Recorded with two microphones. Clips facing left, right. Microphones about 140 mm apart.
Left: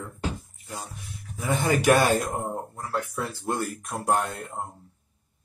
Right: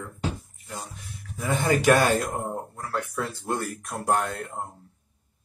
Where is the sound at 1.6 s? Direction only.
Centre (ahead or behind).